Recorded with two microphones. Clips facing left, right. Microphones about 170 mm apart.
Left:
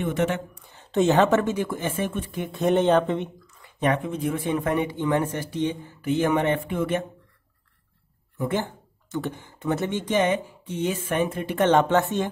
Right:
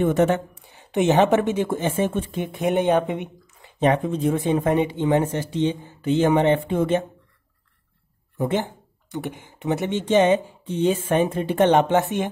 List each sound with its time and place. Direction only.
0.0 s a woman's voice: 40° right (ahead or behind)
0.7 s speech: 15° right (ahead or behind)
3.6 s speech: 25° right (ahead or behind)
8.4 s speech: 20° right (ahead or behind)